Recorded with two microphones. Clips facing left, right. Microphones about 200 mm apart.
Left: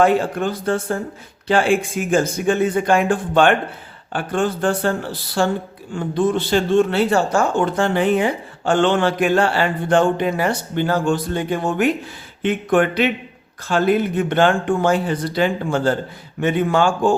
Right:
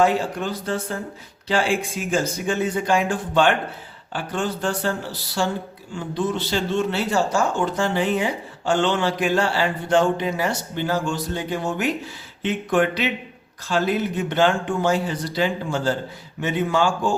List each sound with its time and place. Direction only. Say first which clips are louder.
0.0 s speech: left 4 dB; 55° left (ahead or behind)